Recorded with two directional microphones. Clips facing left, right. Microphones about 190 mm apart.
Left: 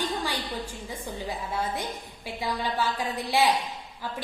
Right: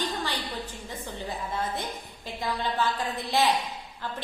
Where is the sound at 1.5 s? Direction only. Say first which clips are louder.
Left 2 dB; 10° left (ahead or behind).